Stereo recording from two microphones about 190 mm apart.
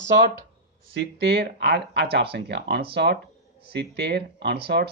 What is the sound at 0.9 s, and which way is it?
Speech, 60° right (ahead or behind).